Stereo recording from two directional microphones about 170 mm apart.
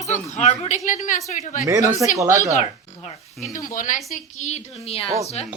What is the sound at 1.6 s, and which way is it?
Speech, 20° right (ahead or behind).